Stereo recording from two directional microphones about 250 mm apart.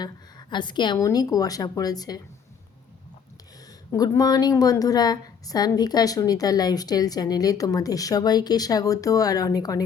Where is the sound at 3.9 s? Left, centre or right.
Centre.